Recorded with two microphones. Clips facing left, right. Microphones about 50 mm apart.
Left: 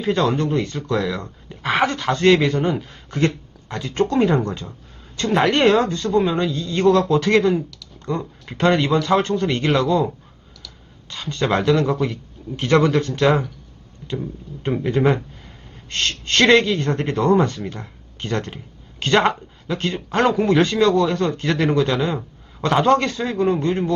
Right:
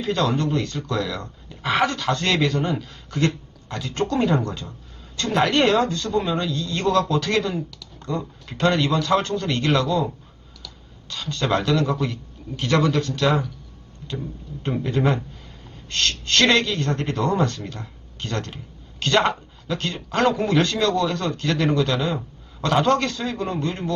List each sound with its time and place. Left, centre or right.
0.0 s speech: left
0.3 s speech: centre
7.7 s computer keyboard: centre
8.0 s speech: left
11.1 s speech: left
12.5 s speech: left
14.8 s speech: left